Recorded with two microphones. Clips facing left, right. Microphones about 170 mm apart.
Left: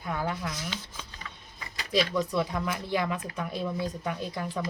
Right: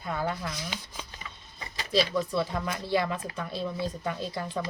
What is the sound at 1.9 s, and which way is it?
Speech, 15° left (ahead or behind).